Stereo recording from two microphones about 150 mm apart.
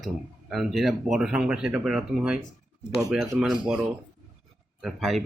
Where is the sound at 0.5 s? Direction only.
Centre (ahead or behind).